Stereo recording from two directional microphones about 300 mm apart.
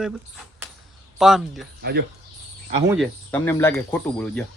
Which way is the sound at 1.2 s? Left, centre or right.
Centre.